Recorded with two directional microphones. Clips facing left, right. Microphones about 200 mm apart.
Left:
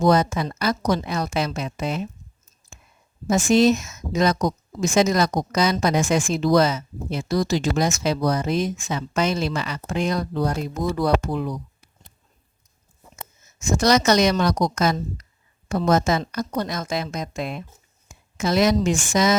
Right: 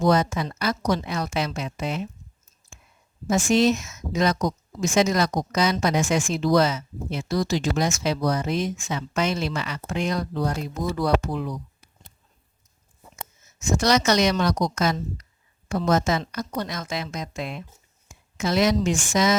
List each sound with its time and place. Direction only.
0.1 s speech: 40° left (ahead or behind)
3.2 s speech: 40° left (ahead or behind)
10.9 s a woman's voice: 50° left (ahead or behind)
13.7 s a woman's voice: 45° left (ahead or behind)